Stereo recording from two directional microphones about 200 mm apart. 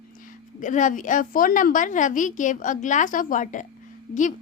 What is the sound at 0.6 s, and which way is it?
A woman's voice, 40° left (ahead or behind).